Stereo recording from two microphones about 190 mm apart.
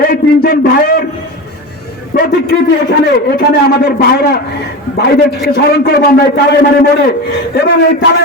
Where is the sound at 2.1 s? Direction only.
50° left (ahead or behind).